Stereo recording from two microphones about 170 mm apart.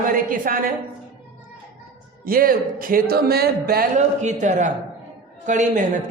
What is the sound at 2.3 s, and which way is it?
A man's voice, 60° right (ahead or behind).